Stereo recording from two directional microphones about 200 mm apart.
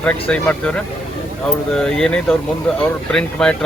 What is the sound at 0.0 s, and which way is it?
Speech, 5° left (ahead or behind).